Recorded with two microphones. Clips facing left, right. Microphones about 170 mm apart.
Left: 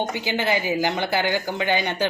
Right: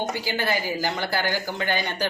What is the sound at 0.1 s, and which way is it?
A woman's voice, 20° left (ahead or behind).